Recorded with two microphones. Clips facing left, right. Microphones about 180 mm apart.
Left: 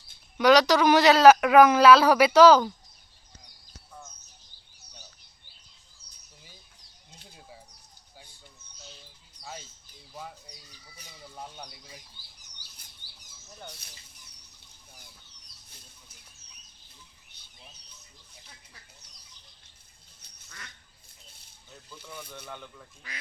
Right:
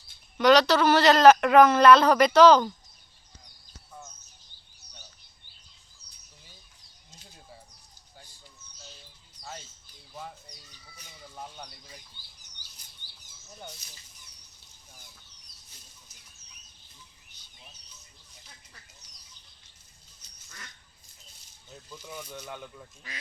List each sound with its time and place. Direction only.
0.3 s a man's voice: 10° left (ahead or behind)
9.4 s a sound: 5° left (ahead or behind)
10.2 s bird: centre (ahead or behind)
11.3 s chicken: 10° left (ahead or behind)
12.8 s rodents: 60° left (ahead or behind)
20.2 s duck: 60° left (ahead or behind)
22.4 s speech: 10° right (ahead or behind)